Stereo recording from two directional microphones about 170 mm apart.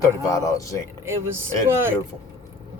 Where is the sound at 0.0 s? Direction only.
20° left (ahead or behind).